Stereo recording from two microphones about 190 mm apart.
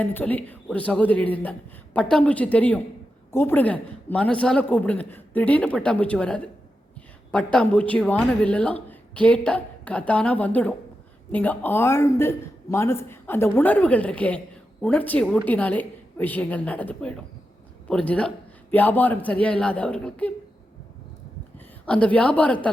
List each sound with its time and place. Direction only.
0.0 s speech: 10° left (ahead or behind)
21.8 s speech: 5° left (ahead or behind)